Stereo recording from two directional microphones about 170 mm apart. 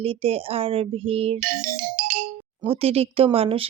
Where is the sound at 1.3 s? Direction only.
55° right (ahead or behind).